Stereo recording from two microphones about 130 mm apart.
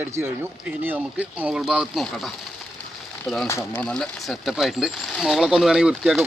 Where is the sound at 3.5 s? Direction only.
20° left (ahead or behind).